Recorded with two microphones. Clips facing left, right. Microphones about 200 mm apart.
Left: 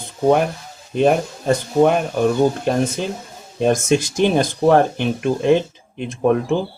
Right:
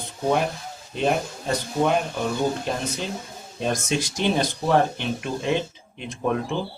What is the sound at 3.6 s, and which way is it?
Speech, 50° left (ahead or behind).